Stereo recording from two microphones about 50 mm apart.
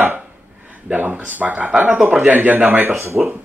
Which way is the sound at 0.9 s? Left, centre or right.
Right.